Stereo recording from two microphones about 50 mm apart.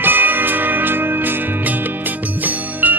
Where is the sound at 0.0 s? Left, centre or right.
Right.